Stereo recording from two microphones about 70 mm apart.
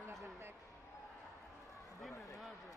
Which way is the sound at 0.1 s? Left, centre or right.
Right.